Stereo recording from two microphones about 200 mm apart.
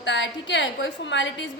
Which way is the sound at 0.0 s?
65° left (ahead or behind).